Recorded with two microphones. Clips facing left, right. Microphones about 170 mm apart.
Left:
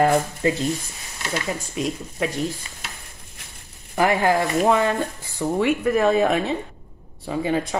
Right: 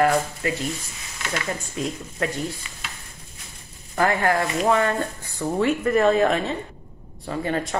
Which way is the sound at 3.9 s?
20° left (ahead or behind).